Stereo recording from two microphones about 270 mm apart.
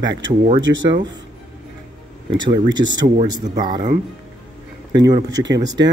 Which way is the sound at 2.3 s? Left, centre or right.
Right.